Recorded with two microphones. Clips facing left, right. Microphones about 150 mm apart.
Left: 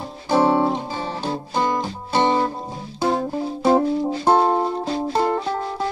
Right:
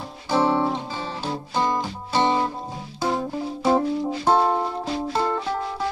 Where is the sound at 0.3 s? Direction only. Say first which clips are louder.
Left 3 dB; 50° left (ahead or behind).